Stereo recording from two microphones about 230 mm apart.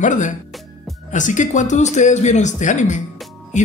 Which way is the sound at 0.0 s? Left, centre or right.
Left.